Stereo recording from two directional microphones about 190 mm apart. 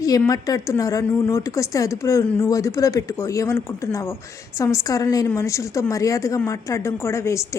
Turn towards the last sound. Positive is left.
turn(degrees=15)  # may be behind; listen again after turning